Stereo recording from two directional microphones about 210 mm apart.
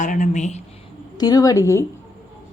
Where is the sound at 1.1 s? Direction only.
15° left (ahead or behind).